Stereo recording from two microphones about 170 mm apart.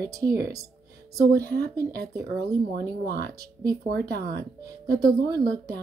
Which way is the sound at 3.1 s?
65° right (ahead or behind).